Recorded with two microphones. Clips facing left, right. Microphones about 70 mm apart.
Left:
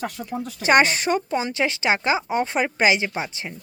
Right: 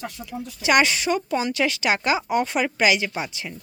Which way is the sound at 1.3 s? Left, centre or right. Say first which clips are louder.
Even; left.